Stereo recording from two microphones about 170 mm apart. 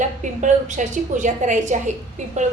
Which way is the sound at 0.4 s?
45° right (ahead or behind).